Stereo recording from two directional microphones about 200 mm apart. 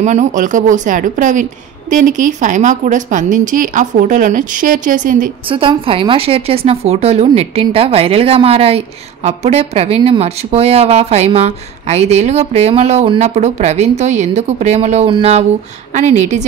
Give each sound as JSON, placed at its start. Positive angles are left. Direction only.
{"t": 0.0, "sound": "a woman's voice", "side_deg": -35}
{"t": 5.5, "sound": "a woman's voice", "side_deg": -25}